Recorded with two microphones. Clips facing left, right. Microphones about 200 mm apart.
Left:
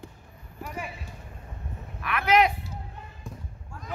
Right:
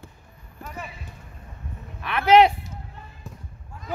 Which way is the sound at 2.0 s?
30° right (ahead or behind).